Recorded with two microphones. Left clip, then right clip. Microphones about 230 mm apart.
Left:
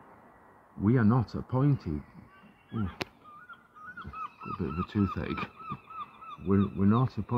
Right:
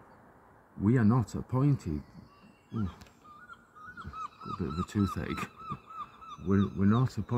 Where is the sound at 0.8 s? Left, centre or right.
Centre.